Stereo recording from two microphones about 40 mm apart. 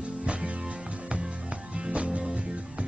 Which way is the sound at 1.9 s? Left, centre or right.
Right.